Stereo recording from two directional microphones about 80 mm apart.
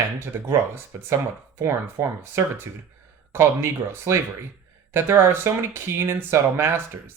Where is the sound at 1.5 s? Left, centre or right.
Right.